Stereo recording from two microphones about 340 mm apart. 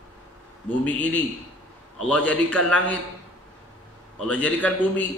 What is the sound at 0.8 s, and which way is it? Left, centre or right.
A man's voice, centre.